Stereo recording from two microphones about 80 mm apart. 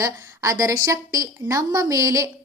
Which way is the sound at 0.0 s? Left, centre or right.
Right.